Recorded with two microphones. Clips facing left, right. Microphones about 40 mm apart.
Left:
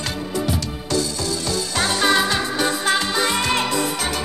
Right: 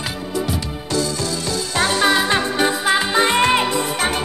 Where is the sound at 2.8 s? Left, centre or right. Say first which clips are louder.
Right 3 dB; centre.